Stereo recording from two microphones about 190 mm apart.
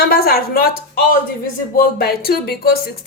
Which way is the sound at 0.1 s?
50° left (ahead or behind).